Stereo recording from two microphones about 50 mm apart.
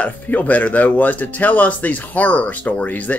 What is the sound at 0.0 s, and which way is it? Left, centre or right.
Speech, left.